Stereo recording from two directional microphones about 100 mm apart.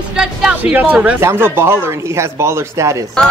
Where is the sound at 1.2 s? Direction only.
25° right (ahead or behind).